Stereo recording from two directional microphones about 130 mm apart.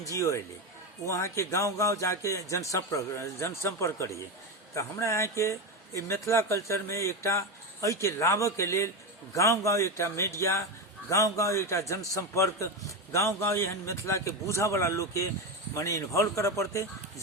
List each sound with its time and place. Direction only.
0.0 s speech: 25° left (ahead or behind)